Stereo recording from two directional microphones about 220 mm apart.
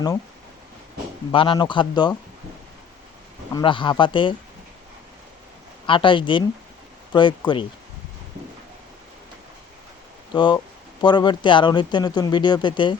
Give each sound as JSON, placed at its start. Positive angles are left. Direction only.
{"t": 1.3, "sound": "speech", "side_deg": 20}
{"t": 3.5, "sound": "speech", "side_deg": 20}
{"t": 5.8, "sound": "speech", "side_deg": 20}
{"t": 10.3, "sound": "speech", "side_deg": 20}